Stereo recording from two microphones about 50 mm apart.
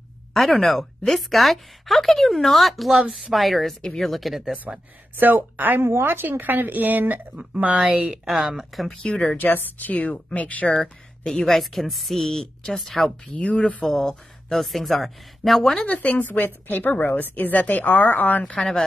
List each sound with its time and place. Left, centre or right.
0.3 s speech: centre
4.4 s speech: centre
5.1 s speech: right
5.8 s speech: right
7.3 s speech: right
8.0 s speech: centre
9.0 s speech: left
9.4 s a woman's voice: left
10.7 s speech: centre
11.4 s speech: centre
13.4 s speech: left
13.8 s speech: centre
15.8 s a woman's voice: left
18.6 s a woman's voice: centre